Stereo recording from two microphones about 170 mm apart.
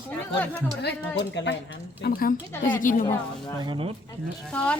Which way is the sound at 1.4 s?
90° left.